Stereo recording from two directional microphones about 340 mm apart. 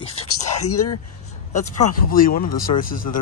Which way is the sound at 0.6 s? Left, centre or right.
Left.